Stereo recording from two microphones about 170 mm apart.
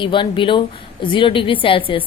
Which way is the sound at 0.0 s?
30° left (ahead or behind).